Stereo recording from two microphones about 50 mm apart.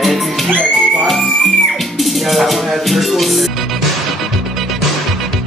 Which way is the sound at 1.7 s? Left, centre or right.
Centre.